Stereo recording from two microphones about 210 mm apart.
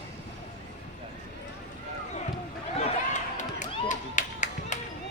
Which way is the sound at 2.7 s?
35° left (ahead or behind).